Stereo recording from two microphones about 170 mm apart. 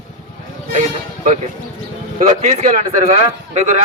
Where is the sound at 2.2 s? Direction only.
40° right (ahead or behind).